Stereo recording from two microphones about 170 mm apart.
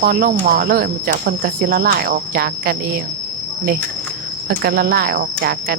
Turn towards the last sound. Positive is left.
turn(degrees=-60)  # may be behind; listen again after turning